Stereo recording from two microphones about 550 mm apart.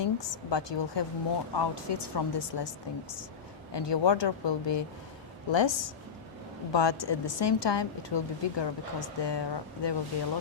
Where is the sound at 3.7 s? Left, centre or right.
Left.